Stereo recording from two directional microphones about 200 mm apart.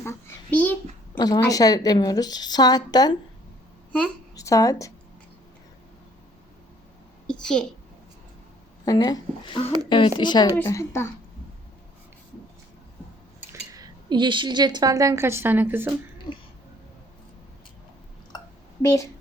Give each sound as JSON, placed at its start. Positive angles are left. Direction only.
{"t": 0.0, "sound": "a child's voice", "side_deg": 10}
{"t": 4.4, "sound": "speech", "side_deg": 15}
{"t": 7.3, "sound": "a child's voice", "side_deg": 5}
{"t": 8.8, "sound": "a child's voice", "side_deg": 20}
{"t": 13.5, "sound": "a woman's voice", "side_deg": -20}
{"t": 18.8, "sound": "speech", "side_deg": 15}